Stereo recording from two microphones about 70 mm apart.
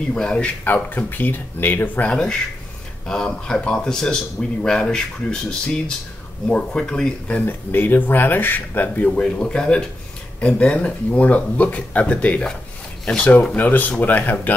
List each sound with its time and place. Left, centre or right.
0.1 s speech: centre; by 2.0 s left
2.0 s a man's voice: centre
7.3 s speech: left; by 13.3 s centre
13.6 s speech: left